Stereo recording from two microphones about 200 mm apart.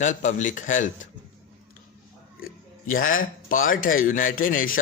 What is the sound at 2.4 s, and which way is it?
Speech, 45° left (ahead or behind).